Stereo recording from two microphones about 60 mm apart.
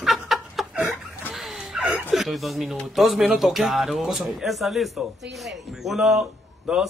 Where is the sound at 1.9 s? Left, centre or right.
Right.